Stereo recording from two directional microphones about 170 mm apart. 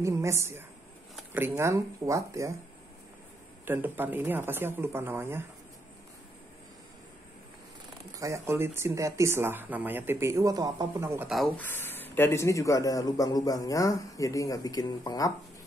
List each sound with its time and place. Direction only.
0.0 s speech: 15° right (ahead or behind)
1.1 s a sound: 10° right (ahead or behind)
1.6 s speech: 15° right (ahead or behind)
3.6 s speech: 10° right (ahead or behind)
8.1 s speech: 20° right (ahead or behind)
11.4 s a man's voice: 10° left (ahead or behind)